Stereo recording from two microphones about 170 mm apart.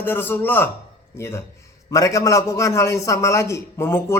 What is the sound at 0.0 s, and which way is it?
A man's voice, 10° left (ahead or behind).